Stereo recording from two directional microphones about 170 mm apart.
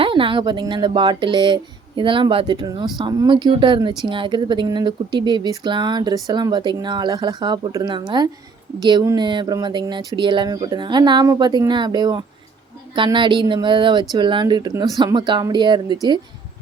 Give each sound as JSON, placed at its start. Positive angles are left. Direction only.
{"t": 0.0, "sound": "speech", "side_deg": -30}